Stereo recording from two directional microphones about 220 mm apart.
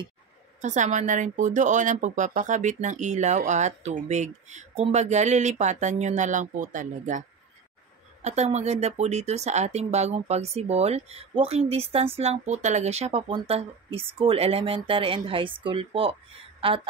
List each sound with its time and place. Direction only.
0.6 s a woman's voice: 35° right (ahead or behind)